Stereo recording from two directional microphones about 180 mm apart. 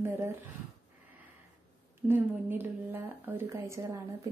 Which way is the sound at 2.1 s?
10° right (ahead or behind).